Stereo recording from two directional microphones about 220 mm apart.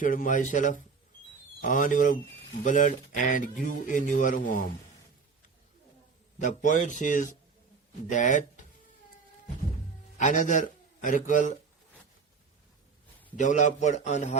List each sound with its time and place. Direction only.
0.0 s speech: 40° left (ahead or behind)
6.4 s speech: 35° left (ahead or behind)
10.2 s a man's voice: 35° left (ahead or behind)
13.3 s speech: 35° left (ahead or behind)